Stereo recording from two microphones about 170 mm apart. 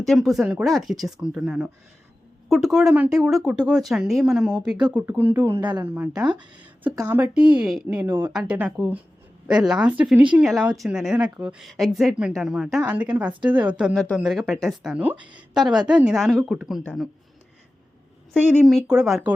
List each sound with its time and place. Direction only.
0.0 s a woman's voice: centre (ahead or behind)
6.2 s speech: 25° right (ahead or behind)
6.6 s a woman's voice: 10° right (ahead or behind)
18.3 s a woman's voice: 10° right (ahead or behind)